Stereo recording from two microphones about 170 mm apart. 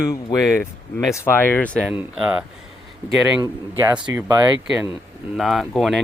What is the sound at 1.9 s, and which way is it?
Speech, 5° right (ahead or behind).